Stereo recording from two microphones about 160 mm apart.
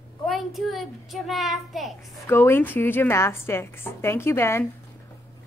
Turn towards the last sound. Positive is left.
turn(degrees=15)  # may be behind; listen again after turning